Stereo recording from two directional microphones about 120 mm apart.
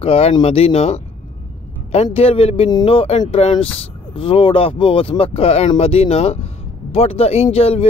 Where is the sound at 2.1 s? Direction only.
55° left (ahead or behind).